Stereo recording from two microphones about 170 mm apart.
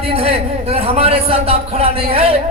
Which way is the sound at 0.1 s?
35° right (ahead or behind).